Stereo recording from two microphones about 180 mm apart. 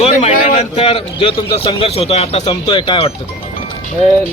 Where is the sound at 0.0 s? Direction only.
35° left (ahead or behind).